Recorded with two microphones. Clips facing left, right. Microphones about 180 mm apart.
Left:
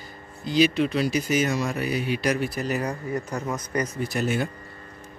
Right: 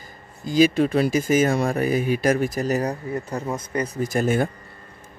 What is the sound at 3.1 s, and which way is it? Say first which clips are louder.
Speech: right 1 dB; 25° right (ahead or behind).